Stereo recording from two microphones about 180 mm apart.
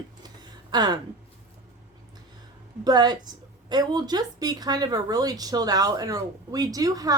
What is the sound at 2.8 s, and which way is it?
A woman's voice, 25° right (ahead or behind).